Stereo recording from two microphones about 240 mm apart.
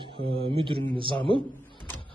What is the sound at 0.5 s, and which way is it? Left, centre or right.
Speech, right.